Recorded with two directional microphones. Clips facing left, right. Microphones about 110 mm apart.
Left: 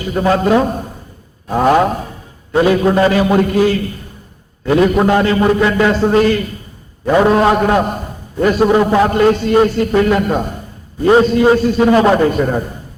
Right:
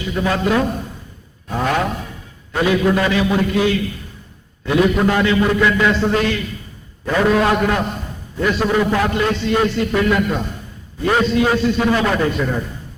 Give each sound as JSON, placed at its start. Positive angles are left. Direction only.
{"t": 0.0, "sound": "a man's voice", "side_deg": 45}
{"t": 7.0, "sound": "a man's voice", "side_deg": 30}
{"t": 9.1, "sound": "a man's voice", "side_deg": 45}